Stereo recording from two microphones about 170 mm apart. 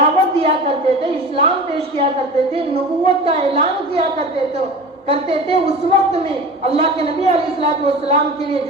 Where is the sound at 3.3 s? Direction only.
35° right (ahead or behind).